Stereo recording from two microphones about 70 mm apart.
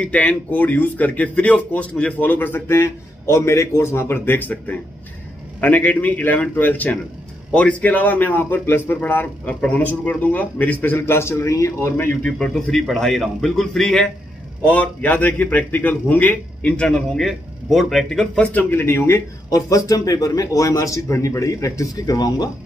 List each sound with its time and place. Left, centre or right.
0.0 s speech: left
12.3 s a man's voice: centre
14.6 s speech: left
17.2 s a man's voice: centre; by 19.2 s left
19.5 s a man's voice: left